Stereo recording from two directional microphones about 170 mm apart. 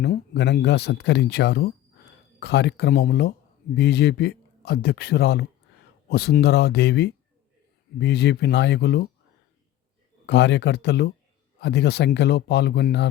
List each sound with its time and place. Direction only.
0.0 s speech: 80° left
10.2 s speech: 90° left